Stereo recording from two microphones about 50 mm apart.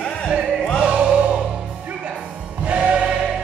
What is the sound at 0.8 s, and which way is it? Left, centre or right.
Music, centre.